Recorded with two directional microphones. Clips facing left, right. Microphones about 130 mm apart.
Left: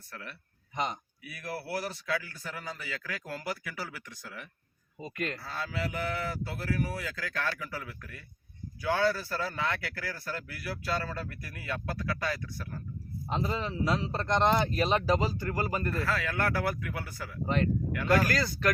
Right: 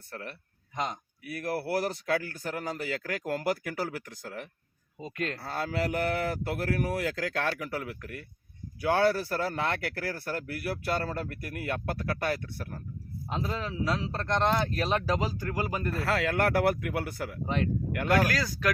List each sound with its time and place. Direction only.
0.1 s speech: 45° right (ahead or behind)
4.9 s a man's voice: 5° left (ahead or behind)
5.4 s a man's voice: 55° right (ahead or behind)
13.2 s a man's voice: centre (ahead or behind)
16.0 s a man's voice: 65° right (ahead or behind)
17.4 s a man's voice: 5° right (ahead or behind)